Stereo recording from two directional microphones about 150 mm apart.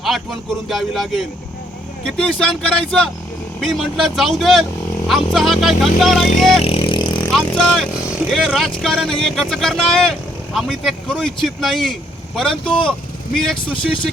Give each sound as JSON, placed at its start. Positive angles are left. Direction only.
{"t": 0.7, "sound": "speech", "side_deg": 0}
{"t": 6.7, "sound": "vehicle", "side_deg": 35}
{"t": 7.3, "sound": "vehicle", "side_deg": 5}
{"t": 8.3, "sound": "speech", "side_deg": 0}